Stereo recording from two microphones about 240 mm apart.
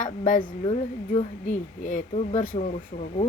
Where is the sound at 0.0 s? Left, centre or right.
Left.